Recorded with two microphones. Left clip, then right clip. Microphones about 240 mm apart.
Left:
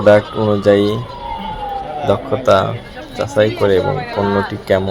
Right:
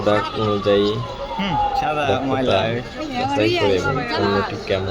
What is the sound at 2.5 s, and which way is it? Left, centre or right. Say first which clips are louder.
Speech: left 8 dB; centre.